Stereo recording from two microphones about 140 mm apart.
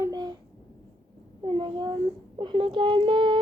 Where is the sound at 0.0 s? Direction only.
30° right (ahead or behind).